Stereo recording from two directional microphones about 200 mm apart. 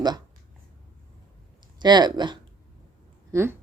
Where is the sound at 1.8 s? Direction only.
20° right (ahead or behind).